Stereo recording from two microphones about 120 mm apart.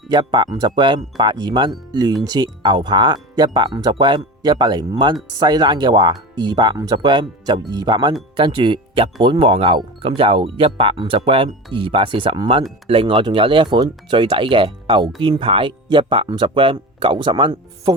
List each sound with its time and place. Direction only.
0.1 s wind chime: 40° right (ahead or behind)
8.4 s speech: 40° right (ahead or behind)